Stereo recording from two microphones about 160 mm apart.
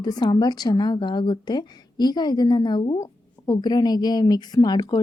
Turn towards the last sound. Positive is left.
turn(degrees=25)  # may be behind; listen again after turning